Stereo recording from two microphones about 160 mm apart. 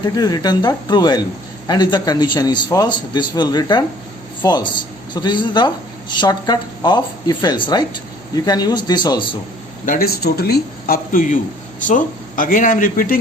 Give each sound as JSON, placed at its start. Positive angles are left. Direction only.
{"t": 0.0, "sound": "speech", "side_deg": 25}
{"t": 9.8, "sound": "speech", "side_deg": 65}